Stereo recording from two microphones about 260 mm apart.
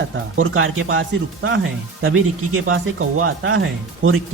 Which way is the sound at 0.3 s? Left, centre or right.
Right.